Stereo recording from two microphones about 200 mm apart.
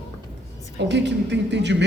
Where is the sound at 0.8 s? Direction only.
60° right (ahead or behind).